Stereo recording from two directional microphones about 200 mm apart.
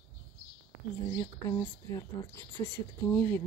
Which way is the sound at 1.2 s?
20° left (ahead or behind).